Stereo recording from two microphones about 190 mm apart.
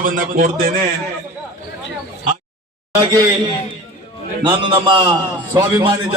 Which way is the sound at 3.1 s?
20° right (ahead or behind).